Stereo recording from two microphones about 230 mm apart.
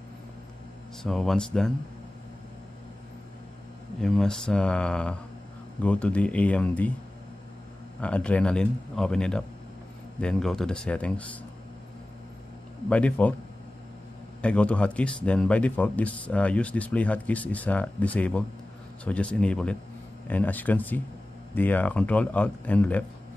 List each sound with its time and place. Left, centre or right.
1.0 s speech: centre
4.0 s speech: centre
8.0 s speech: centre
12.9 s speech: centre
14.4 s speech: centre